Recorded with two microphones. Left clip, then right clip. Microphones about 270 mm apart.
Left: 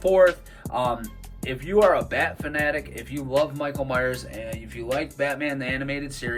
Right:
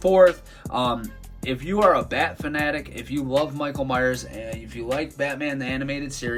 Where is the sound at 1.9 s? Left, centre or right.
Centre.